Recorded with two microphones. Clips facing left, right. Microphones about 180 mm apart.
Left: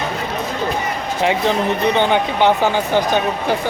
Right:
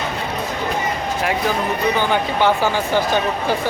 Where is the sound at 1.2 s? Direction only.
25° left (ahead or behind).